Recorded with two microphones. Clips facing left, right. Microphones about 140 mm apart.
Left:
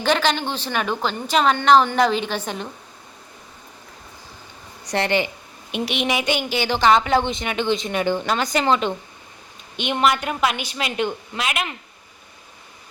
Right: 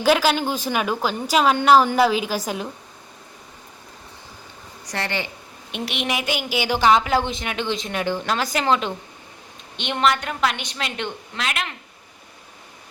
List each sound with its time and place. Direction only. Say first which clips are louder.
0.0 s a woman's voice: right 2 dB; 5° right (ahead or behind)
4.9 s speech: left 6 dB; 20° left (ahead or behind)
5.7 s a woman's voice: left 3 dB; centre (ahead or behind)